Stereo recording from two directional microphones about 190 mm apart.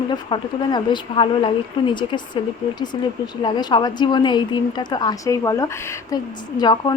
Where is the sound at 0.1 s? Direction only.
25° left (ahead or behind).